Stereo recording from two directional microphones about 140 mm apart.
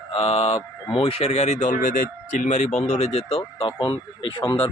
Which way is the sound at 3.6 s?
35° left (ahead or behind).